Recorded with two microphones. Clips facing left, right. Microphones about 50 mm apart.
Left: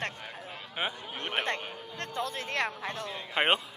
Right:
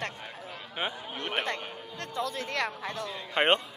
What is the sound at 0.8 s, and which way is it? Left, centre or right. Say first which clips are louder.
Speech: even; centre.